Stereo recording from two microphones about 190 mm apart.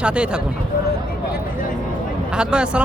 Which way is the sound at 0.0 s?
5° right (ahead or behind).